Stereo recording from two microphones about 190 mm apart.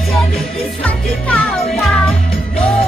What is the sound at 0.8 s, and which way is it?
Music, 5° left (ahead or behind).